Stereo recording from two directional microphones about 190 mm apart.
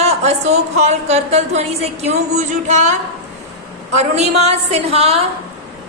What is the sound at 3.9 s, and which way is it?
Speech, 35° right (ahead or behind).